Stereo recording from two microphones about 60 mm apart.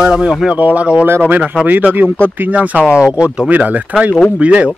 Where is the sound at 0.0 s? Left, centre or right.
Centre.